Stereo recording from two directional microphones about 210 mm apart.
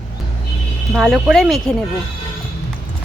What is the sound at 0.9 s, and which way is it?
Speech, centre (ahead or behind).